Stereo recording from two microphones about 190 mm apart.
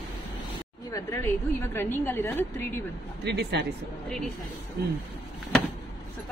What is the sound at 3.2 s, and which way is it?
Speech, 60° right (ahead or behind).